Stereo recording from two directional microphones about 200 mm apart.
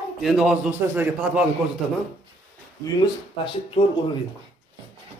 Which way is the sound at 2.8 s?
25° left (ahead or behind).